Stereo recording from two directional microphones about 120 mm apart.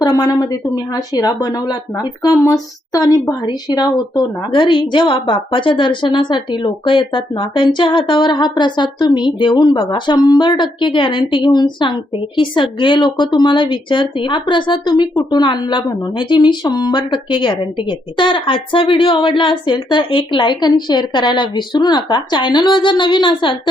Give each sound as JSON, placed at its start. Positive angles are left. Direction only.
{"t": 0.0, "sound": "speech", "side_deg": 30}